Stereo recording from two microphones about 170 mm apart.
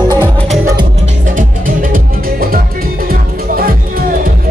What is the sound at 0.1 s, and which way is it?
Music, 15° left (ahead or behind).